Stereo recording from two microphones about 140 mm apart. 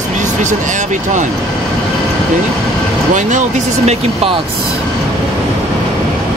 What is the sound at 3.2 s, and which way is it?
Speech, 60° right (ahead or behind).